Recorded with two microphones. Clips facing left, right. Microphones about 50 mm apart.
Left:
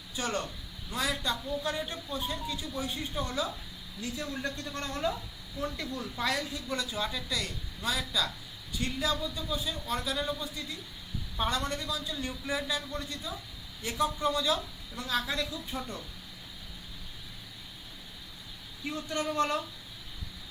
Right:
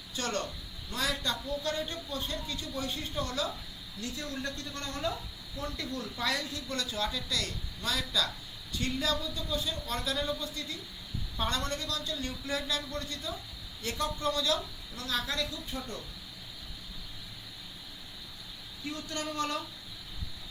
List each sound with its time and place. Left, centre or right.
0.2 s a man's voice: centre
4.4 s a man's voice: left
18.9 s speech: centre